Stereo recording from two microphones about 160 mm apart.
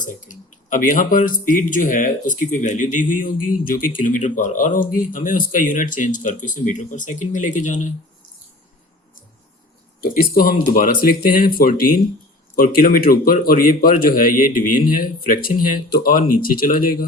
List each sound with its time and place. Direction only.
0.0 s speech: 55° left (ahead or behind)
10.0 s speech: 65° left (ahead or behind)